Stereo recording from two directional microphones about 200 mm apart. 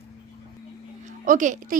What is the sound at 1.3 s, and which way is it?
Speech, 40° right (ahead or behind).